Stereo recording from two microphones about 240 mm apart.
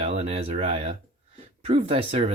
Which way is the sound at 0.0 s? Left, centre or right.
Right.